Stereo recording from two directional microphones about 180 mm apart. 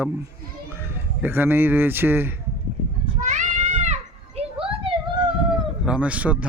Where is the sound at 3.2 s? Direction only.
40° right (ahead or behind).